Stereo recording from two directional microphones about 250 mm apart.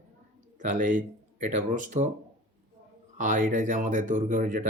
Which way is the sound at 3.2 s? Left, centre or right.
Right.